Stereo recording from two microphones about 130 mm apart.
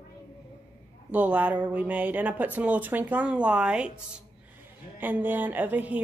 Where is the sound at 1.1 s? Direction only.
10° right (ahead or behind).